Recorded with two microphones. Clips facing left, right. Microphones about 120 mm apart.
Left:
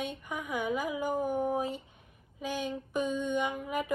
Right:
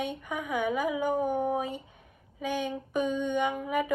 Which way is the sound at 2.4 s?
60° right (ahead or behind).